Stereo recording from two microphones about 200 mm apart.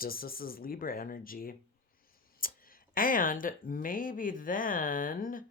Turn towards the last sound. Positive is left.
turn(degrees=45)  # may be behind; listen again after turning